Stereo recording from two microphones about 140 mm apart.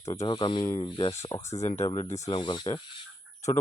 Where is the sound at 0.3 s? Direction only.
35° left (ahead or behind).